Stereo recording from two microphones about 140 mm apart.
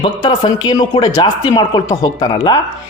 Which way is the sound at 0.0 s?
30° left (ahead or behind).